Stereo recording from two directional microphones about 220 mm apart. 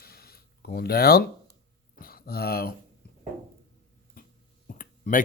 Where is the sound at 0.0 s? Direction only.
45° left (ahead or behind).